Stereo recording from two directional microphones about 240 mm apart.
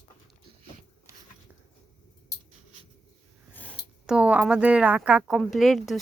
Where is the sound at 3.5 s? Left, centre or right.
Centre.